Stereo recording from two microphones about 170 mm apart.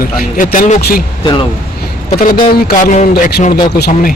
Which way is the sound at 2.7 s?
50° left (ahead or behind).